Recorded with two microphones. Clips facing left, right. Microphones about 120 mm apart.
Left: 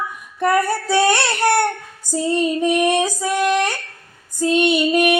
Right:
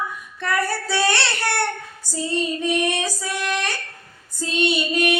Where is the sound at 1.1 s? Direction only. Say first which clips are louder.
Left 6 dB; 50° left (ahead or behind).